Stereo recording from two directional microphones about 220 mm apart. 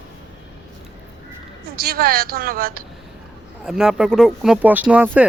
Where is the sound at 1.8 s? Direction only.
45° right (ahead or behind).